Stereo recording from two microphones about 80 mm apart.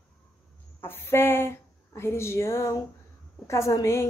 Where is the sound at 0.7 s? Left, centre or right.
Left.